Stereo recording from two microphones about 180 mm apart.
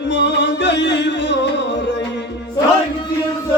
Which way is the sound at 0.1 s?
75° left (ahead or behind).